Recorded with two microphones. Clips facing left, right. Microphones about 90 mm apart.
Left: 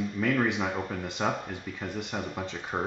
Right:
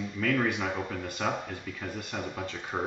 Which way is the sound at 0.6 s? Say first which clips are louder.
Left 1 dB; 5° left (ahead or behind).